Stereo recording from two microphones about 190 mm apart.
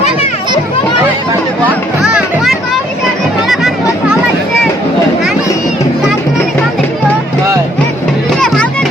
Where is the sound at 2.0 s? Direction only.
Centre (ahead or behind).